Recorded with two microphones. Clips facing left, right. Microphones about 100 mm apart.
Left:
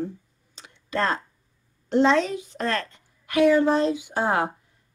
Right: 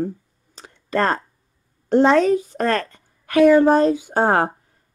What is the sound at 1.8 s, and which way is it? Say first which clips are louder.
A woman's voice: right 5 dB; 45° right (ahead or behind).